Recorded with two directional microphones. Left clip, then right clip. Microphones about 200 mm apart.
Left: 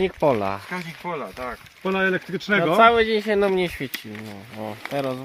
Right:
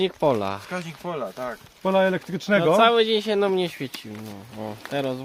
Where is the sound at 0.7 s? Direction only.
55° right (ahead or behind); by 2.7 s 80° right.